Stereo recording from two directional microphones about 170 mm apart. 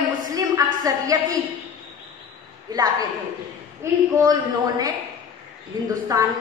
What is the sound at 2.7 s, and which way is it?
A woman's voice, 20° right (ahead or behind).